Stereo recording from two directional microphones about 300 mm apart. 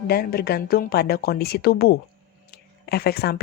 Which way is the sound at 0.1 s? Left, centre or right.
Left.